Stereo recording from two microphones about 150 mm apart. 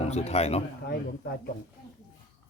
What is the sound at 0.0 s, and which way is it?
Speech, 45° left (ahead or behind).